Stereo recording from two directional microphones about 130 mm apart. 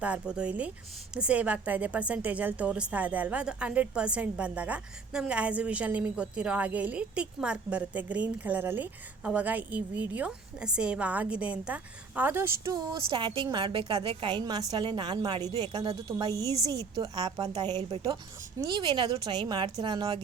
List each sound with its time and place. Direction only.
0.0 s a woman's voice: 10° right (ahead or behind)
12.7 s a woman's voice: 35° right (ahead or behind)